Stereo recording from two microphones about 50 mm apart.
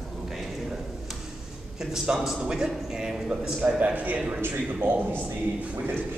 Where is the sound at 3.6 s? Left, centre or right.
Right.